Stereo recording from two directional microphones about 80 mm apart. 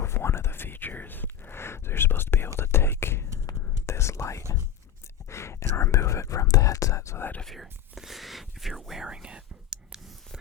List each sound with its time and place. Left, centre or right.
0.0 s whispering: left
7.4 s whispering: centre